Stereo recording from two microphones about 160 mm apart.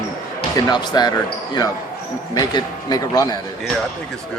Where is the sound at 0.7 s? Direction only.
25° left (ahead or behind).